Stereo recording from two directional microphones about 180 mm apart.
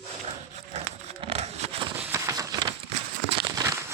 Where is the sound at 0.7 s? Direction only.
35° right (ahead or behind).